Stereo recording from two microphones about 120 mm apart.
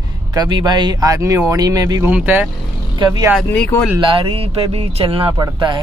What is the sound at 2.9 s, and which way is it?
Speech, 35° right (ahead or behind).